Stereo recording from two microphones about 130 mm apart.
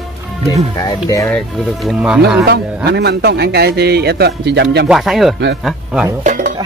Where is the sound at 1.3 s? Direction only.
Centre (ahead or behind).